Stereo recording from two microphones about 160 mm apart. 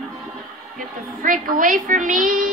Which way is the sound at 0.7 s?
60° right (ahead or behind).